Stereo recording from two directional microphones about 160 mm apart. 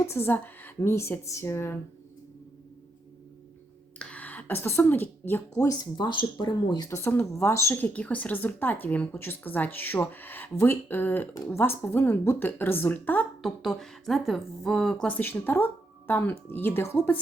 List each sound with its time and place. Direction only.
0.0 s speech: 15° left (ahead or behind)
3.9 s speech: 10° left (ahead or behind)
5.7 s speech: 25° left (ahead or behind); by 13.2 s 10° left (ahead or behind)
13.4 s speech: centre (ahead or behind)